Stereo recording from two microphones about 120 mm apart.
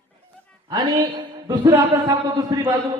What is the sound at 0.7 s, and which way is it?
Speech, 40° right (ahead or behind).